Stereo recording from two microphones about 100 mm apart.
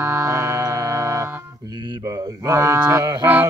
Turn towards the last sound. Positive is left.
turn(degrees=-20)  # may be behind; listen again after turning